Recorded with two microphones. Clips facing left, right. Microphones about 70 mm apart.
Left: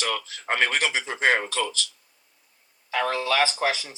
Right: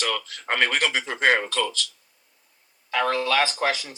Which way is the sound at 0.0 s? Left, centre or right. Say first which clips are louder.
Right 1 dB; centre.